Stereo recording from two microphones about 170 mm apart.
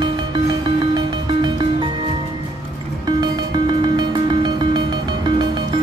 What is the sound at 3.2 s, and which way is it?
Music, 25° right (ahead or behind).